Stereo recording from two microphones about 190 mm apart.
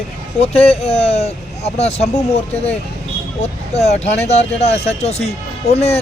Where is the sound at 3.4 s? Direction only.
35° left (ahead or behind).